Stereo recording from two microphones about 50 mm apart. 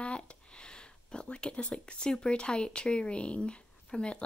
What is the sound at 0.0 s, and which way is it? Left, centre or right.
Speech, left.